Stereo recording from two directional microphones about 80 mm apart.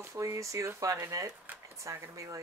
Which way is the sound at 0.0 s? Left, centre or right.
Right.